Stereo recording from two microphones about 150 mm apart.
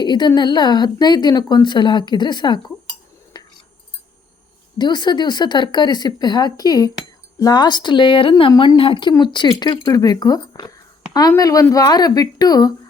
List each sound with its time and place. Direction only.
0.0 s a woman's voice: 30° left (ahead or behind)
3.3 s a sound: 25° left (ahead or behind)
4.8 s a woman's voice: 30° left (ahead or behind)